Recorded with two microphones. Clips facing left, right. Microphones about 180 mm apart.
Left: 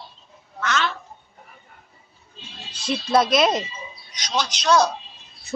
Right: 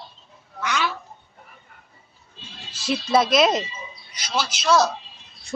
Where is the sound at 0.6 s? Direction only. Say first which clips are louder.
Left 1 dB; 10° right (ahead or behind).